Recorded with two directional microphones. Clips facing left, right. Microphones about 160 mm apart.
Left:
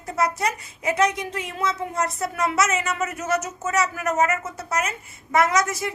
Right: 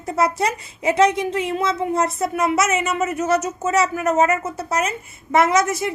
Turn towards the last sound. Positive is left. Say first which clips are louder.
# right 4 dB
turn(degrees=-25)  # may be behind; listen again after turning